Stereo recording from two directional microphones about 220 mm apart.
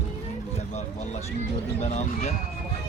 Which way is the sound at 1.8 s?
30° left (ahead or behind).